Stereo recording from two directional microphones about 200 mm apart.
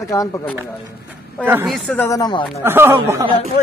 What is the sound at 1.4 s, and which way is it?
Speech, 10° right (ahead or behind).